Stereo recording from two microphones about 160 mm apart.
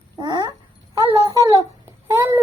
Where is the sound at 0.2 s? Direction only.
25° right (ahead or behind).